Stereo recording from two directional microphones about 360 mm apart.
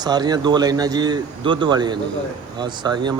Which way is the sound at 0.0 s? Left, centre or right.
Centre.